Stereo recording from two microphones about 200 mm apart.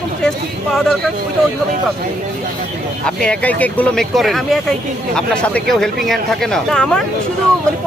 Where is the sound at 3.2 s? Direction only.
5° left (ahead or behind).